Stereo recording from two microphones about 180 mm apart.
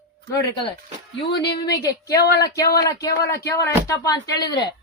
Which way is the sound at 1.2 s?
70° left (ahead or behind).